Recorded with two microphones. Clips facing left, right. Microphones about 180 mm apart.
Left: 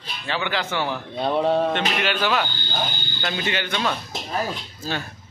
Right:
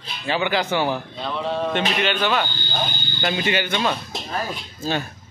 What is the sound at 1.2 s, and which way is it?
Speech, 50° left (ahead or behind).